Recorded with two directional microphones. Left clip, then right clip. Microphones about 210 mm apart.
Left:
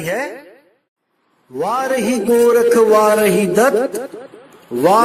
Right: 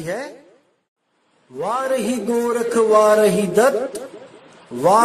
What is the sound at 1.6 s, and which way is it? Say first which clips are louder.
A man's voice: left 3 dB; 15° left (ahead or behind).